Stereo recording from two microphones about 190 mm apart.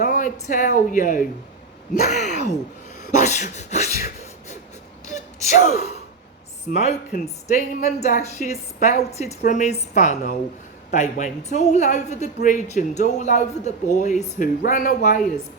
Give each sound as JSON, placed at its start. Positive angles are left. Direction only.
{"t": 0.0, "sound": "a woman's voice", "side_deg": 45}
{"t": 5.0, "sound": "gasp", "side_deg": 40}
{"t": 6.7, "sound": "a woman's voice", "side_deg": 40}